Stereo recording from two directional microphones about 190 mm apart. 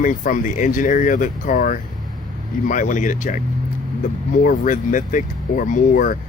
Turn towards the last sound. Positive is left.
turn(degrees=45)  # may be behind; listen again after turning